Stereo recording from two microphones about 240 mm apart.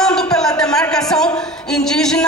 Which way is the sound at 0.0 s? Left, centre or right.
Centre.